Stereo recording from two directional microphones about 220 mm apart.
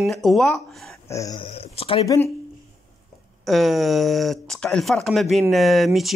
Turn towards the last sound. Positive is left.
turn(degrees=0)  # may be behind; listen again after turning